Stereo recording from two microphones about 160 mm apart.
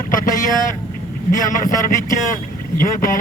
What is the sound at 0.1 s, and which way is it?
Speech, 55° left (ahead or behind).